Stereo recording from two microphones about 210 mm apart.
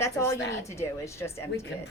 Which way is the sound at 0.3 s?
55° left (ahead or behind).